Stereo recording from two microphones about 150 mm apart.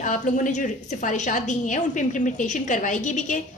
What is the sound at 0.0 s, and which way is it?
A woman's voice, 55° left (ahead or behind).